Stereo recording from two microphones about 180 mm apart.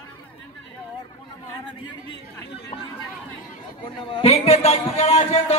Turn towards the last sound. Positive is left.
turn(degrees=35)  # may be behind; listen again after turning